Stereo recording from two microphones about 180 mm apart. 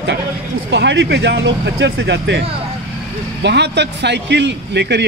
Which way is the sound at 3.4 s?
70° right (ahead or behind).